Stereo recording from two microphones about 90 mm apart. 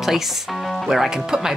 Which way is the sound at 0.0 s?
Centre (ahead or behind).